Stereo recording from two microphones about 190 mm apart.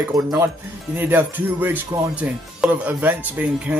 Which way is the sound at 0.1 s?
20° right (ahead or behind).